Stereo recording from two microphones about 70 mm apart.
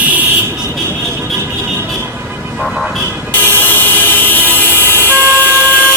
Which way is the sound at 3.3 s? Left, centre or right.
Left.